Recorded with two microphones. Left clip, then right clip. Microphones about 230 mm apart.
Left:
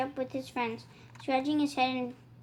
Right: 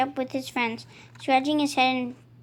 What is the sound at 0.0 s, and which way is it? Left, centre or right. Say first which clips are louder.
A woman's voice: right 7 dB; right.